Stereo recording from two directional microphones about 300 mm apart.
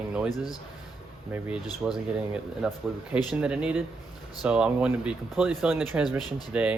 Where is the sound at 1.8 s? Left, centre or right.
Centre.